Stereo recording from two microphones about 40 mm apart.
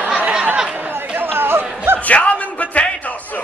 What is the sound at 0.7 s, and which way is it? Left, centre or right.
Chatter, right.